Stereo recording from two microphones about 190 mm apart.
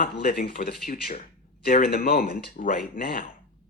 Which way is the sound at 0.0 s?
50° left (ahead or behind).